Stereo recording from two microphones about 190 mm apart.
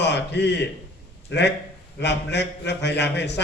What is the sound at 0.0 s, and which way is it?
A man's voice, 65° left (ahead or behind).